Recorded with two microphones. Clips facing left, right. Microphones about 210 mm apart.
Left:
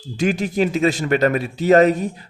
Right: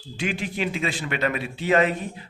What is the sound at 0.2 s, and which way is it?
A man's voice, 40° left (ahead or behind).